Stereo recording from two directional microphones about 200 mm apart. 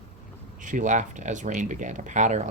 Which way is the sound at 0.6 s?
40° right (ahead or behind).